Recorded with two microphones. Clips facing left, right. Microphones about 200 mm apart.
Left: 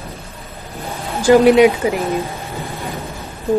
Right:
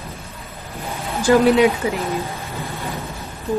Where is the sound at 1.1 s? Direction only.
15° left (ahead or behind).